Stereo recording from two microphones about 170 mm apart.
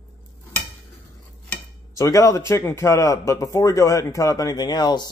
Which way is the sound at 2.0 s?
20° left (ahead or behind).